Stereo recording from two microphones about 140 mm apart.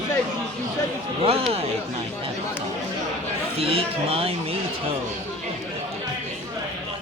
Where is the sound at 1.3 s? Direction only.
45° right (ahead or behind).